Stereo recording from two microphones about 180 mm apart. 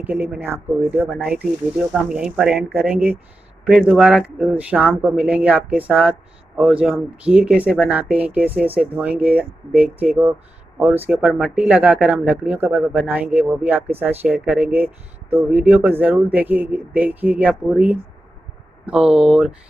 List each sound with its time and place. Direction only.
0.0 s speech: 10° right (ahead or behind)